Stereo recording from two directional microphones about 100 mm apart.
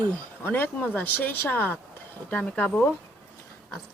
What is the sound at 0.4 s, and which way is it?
Speech, 20° left (ahead or behind).